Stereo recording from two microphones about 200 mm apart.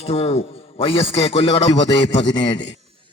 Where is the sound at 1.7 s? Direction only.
65° left (ahead or behind).